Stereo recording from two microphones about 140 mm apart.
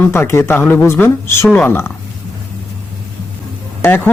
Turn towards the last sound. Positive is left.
turn(degrees=15)  # may be behind; listen again after turning